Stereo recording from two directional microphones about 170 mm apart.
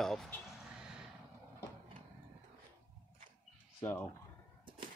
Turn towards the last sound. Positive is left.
turn(degrees=10)  # may be behind; listen again after turning